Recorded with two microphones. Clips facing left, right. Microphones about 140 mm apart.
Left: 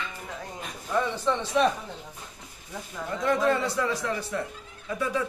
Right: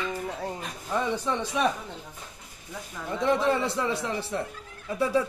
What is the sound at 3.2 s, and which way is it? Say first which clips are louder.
A man's voice: even; 25° right (ahead or behind).